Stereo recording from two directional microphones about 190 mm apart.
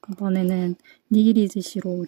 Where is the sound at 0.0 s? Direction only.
40° right (ahead or behind).